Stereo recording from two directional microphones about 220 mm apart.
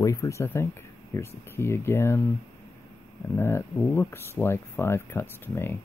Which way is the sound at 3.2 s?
10° left (ahead or behind).